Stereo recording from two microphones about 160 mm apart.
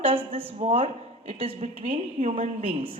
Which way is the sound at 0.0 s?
35° right (ahead or behind).